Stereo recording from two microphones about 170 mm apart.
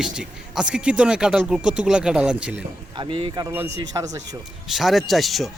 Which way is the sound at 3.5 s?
15° right (ahead or behind).